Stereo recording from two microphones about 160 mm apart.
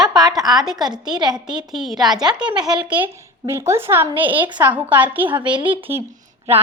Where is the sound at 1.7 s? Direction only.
Centre (ahead or behind).